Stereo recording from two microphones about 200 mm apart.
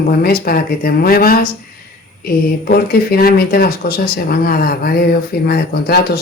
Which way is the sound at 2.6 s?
50° left (ahead or behind).